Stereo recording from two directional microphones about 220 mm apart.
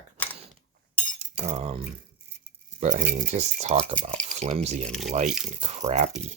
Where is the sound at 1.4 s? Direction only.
30° right (ahead or behind).